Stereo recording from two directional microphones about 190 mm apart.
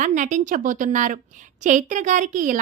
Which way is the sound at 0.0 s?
40° right (ahead or behind).